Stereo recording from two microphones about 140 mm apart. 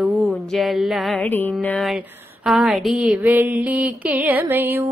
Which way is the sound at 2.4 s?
5° right (ahead or behind).